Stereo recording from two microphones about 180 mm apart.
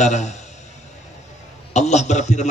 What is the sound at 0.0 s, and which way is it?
Speech, 40° left (ahead or behind).